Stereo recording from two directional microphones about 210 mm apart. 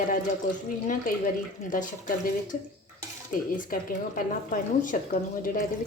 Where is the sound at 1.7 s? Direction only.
40° left (ahead or behind).